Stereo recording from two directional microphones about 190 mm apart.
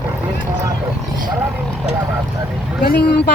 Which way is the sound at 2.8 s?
55° left (ahead or behind).